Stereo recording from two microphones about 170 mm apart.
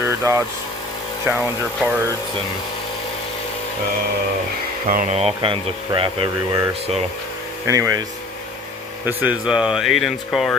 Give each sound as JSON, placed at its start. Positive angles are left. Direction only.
{"t": 0.0, "sound": "vehicle", "side_deg": -15}
{"t": 1.8, "sound": "speech", "side_deg": -10}
{"t": 4.9, "sound": "speech", "side_deg": -50}
{"t": 5.1, "sound": "speech", "side_deg": -35}
{"t": 7.7, "sound": "speech", "side_deg": -20}
{"t": 9.0, "sound": "speech", "side_deg": -5}